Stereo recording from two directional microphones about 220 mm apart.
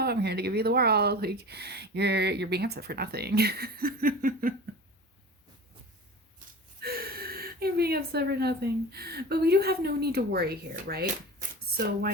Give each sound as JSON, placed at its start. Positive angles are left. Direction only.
{"t": 0.0, "sound": "speech", "side_deg": -45}
{"t": 6.8, "sound": "speech", "side_deg": -45}